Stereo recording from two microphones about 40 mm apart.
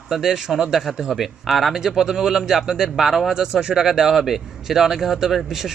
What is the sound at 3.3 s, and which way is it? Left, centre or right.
Speech, centre.